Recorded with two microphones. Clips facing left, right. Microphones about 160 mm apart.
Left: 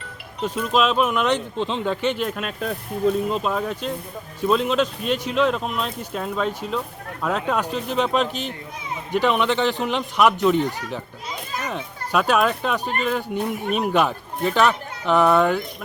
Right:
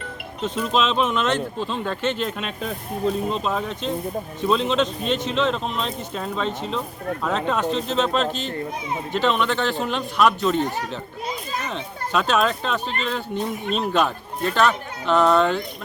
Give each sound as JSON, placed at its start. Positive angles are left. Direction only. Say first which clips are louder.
{"t": 0.4, "sound": "speech", "louder": "left 1 dB", "side_deg": 10}
{"t": 11.7, "sound": "speech", "louder": "left 1 dB", "side_deg": 10}